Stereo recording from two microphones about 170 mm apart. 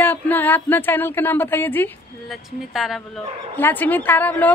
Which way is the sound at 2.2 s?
Centre (ahead or behind).